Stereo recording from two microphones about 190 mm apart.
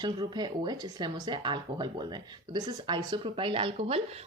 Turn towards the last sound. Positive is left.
turn(degrees=-30)  # may be behind; listen again after turning